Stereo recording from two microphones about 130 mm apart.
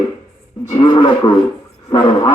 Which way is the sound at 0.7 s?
35° left (ahead or behind).